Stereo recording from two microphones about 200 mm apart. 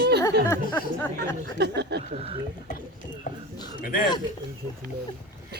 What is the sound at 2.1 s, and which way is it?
Speech, 30° right (ahead or behind).